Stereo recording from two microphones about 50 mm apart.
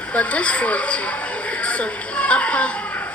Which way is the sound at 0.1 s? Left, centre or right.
Left.